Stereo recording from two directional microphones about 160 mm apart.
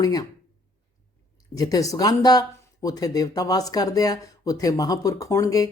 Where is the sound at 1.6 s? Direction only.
20° left (ahead or behind).